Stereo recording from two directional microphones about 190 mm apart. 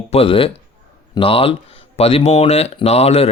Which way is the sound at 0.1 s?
30° left (ahead or behind).